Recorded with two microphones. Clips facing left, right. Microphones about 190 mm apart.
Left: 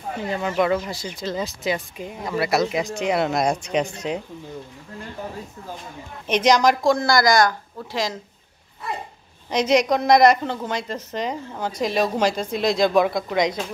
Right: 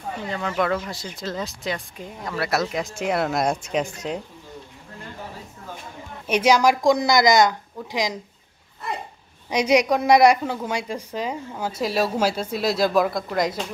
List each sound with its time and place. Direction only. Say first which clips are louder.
0.3 s speech: left 3 dB; 10° left (ahead or behind)
6.2 s a woman's voice: even; 10° right (ahead or behind)
9.5 s a woman's voice: even; 10° right (ahead or behind)